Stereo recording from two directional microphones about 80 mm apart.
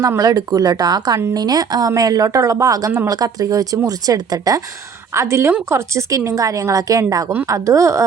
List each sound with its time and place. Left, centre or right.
0.2 s speech: right
5.1 s a woman's voice: right